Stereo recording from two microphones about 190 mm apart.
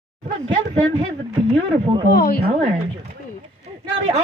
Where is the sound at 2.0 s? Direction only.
55° left (ahead or behind).